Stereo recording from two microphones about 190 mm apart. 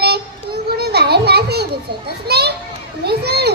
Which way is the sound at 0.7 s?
60° right (ahead or behind).